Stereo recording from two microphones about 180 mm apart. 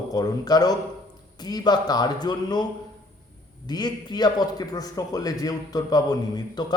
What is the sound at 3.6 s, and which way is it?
Speech, 25° left (ahead or behind).